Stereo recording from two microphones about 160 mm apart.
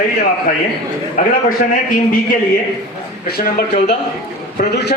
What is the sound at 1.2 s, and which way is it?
Speech, 55° left (ahead or behind).